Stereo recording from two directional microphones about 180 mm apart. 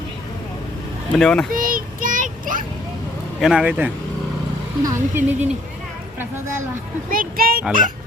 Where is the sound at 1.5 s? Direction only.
50° right (ahead or behind).